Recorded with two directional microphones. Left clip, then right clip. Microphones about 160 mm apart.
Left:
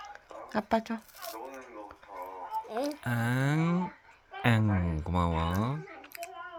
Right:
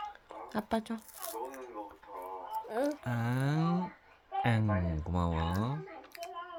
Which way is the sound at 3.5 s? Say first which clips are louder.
Left 2 dB; 10° right (ahead or behind).